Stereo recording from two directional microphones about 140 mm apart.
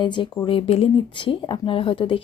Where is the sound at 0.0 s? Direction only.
35° left (ahead or behind).